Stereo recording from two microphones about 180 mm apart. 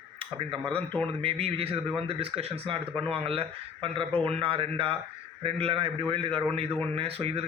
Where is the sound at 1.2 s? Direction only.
30° right (ahead or behind).